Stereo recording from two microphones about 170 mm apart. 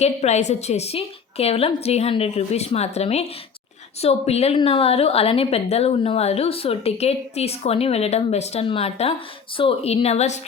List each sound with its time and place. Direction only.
0.0 s a woman's voice: 40° left (ahead or behind)